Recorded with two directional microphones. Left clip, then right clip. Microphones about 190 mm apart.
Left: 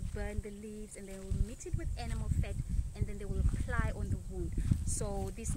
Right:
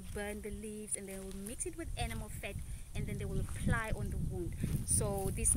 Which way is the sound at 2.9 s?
30° right (ahead or behind).